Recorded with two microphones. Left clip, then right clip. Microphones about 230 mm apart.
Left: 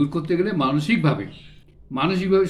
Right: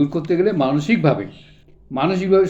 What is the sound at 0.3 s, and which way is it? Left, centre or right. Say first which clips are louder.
Speech: right 5 dB; centre.